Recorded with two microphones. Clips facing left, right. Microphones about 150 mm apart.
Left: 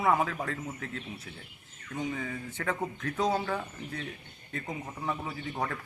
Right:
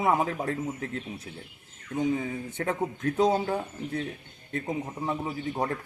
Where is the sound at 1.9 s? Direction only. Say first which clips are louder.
Right 7 dB; 20° right (ahead or behind).